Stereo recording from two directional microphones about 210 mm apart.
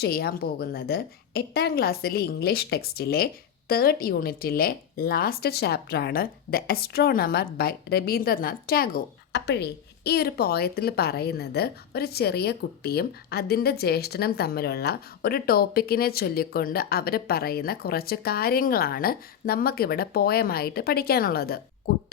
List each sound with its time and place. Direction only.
0.0 s a woman's voice: 45° left (ahead or behind)